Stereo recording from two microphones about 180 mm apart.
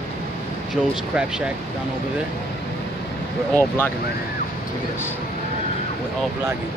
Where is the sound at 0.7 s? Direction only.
5° right (ahead or behind).